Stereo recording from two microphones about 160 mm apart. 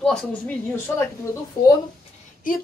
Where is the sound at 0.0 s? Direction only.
5° left (ahead or behind).